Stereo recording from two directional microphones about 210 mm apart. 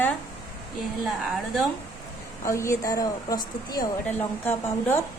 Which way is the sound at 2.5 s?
15° left (ahead or behind).